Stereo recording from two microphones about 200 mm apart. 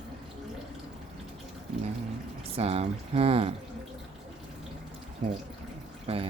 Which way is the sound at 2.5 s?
30° right (ahead or behind).